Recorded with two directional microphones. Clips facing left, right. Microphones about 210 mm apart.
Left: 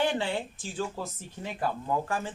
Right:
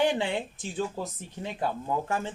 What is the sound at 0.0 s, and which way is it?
A man's voice, 15° right (ahead or behind).